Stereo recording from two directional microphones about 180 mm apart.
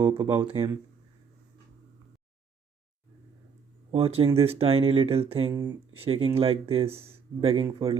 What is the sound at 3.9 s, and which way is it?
Speech, 30° right (ahead or behind).